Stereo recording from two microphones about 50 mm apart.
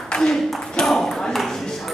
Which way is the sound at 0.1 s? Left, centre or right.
Centre.